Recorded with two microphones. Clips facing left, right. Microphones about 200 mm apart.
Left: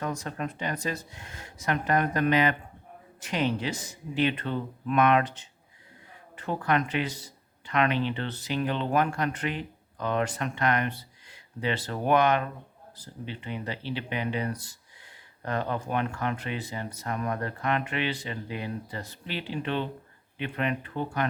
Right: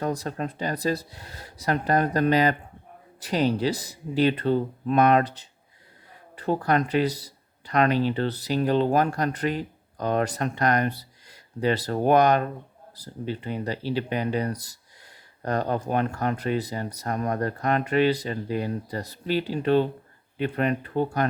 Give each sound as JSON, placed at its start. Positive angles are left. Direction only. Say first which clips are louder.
{"t": 0.0, "sound": "speech", "louder": "right 4 dB", "side_deg": -35}